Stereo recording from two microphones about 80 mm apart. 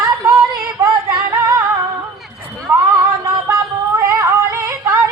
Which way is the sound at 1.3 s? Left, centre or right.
Right.